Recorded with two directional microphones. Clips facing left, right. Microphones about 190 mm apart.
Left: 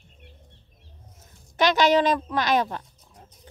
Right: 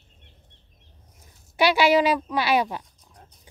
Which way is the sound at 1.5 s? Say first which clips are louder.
Right 1 dB; 10° right (ahead or behind).